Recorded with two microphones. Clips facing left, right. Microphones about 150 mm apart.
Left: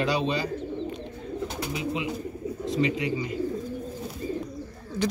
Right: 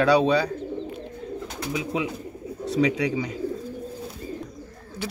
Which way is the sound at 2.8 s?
90° right.